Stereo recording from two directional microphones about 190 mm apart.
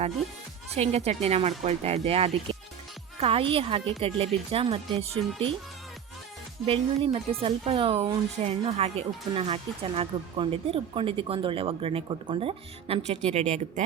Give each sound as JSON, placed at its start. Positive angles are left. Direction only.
{"t": 0.7, "sound": "speech", "side_deg": -35}
{"t": 6.7, "sound": "speech", "side_deg": -30}